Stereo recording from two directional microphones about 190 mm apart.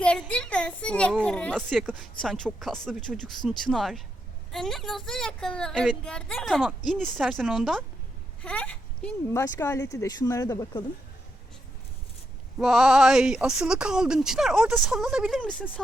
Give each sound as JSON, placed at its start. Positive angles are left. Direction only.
{"t": 0.0, "sound": "speech", "side_deg": 5}
{"t": 12.5, "sound": "speech", "side_deg": -5}